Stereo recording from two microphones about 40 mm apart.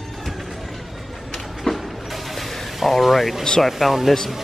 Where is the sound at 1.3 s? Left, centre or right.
Centre.